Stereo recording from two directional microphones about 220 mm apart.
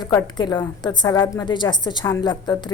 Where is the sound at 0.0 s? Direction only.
15° left (ahead or behind).